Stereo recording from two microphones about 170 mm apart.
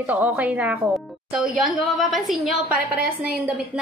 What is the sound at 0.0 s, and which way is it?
A woman's voice, 10° right (ahead or behind).